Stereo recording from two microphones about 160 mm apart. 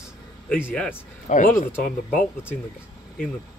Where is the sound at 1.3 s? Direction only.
55° left (ahead or behind).